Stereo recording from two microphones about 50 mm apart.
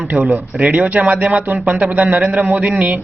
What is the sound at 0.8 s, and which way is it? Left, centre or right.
Speech, right.